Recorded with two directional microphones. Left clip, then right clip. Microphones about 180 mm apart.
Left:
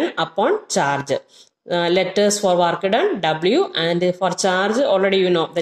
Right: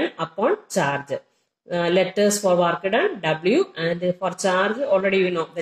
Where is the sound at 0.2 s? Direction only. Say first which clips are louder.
Left 5 dB; 45° left (ahead or behind).